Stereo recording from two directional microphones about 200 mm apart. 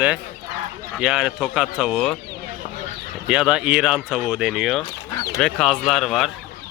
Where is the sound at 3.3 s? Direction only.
5° right (ahead or behind).